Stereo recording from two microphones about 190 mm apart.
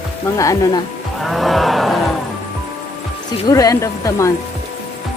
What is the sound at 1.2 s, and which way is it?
Cattle, centre (ahead or behind).